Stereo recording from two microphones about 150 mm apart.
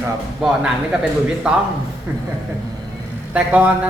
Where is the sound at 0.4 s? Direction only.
5° right (ahead or behind).